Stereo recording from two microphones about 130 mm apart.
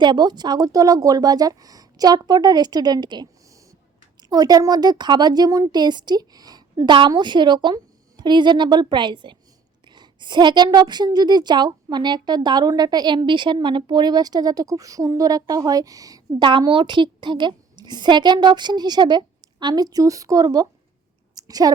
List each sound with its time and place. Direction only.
0.0 s a woman's voice: 35° right (ahead or behind)
16.3 s a woman's voice: 40° right (ahead or behind)
21.3 s a sound: 30° right (ahead or behind)